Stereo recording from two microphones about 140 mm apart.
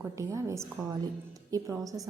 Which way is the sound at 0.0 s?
20° right (ahead or behind).